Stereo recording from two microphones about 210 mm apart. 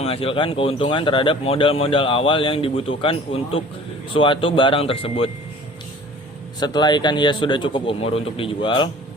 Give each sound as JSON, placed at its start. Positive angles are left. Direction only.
{"t": 0.0, "sound": "speech", "side_deg": 30}
{"t": 6.6, "sound": "speech", "side_deg": 20}